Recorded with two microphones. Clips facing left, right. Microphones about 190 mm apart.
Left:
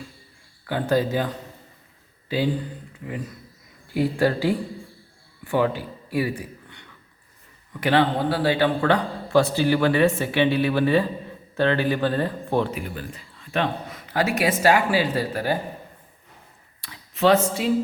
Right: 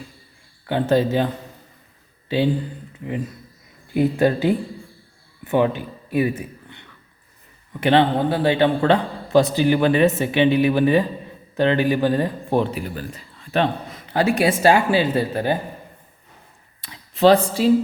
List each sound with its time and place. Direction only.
0.7 s a man's voice: 25° right (ahead or behind)
3.9 s a man's voice: 20° right (ahead or behind)
12.7 s a man's voice: 35° right (ahead or behind)
16.8 s a sound: 20° right (ahead or behind)
17.2 s a woman's voice: 35° right (ahead or behind)